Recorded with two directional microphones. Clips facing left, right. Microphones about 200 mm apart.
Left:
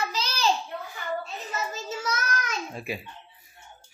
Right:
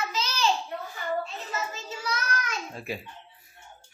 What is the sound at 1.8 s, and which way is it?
Child singing, 45° left (ahead or behind).